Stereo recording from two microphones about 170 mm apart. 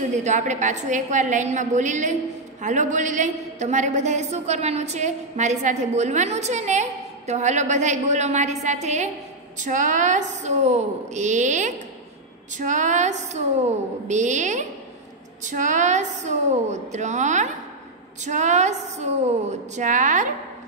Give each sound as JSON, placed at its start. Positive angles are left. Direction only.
{"t": 0.0, "sound": "a woman's voice", "side_deg": -45}